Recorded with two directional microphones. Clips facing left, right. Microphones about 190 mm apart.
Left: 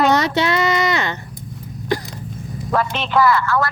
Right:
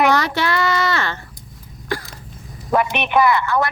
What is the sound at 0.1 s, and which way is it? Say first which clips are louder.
Child singing: left 2 dB; 20° left (ahead or behind).